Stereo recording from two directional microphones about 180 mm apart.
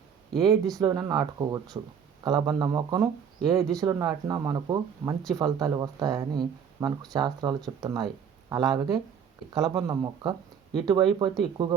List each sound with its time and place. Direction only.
0.3 s speech: 20° right (ahead or behind)